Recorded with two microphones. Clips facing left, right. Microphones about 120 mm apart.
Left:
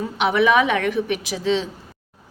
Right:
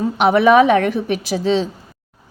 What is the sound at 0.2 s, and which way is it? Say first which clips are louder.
A woman's voice: right 6 dB; 40° right (ahead or behind).